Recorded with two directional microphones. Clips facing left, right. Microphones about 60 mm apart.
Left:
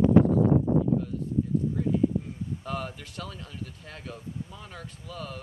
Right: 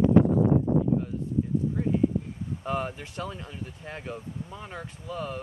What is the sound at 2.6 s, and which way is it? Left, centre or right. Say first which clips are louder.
Speech: right 7 dB; right.